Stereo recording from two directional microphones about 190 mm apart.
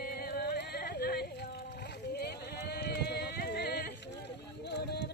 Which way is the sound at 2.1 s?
55° left (ahead or behind).